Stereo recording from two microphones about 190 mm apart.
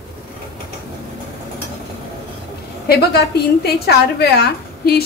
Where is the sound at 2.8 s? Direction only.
55° left (ahead or behind).